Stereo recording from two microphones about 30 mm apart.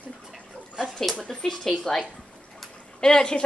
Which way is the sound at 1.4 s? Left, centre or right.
Centre.